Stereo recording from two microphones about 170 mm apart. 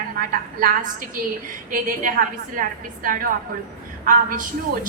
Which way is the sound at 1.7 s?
55° right (ahead or behind).